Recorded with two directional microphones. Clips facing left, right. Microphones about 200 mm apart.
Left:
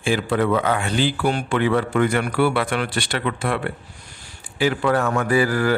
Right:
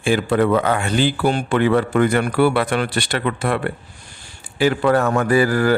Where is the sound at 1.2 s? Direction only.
30° right (ahead or behind).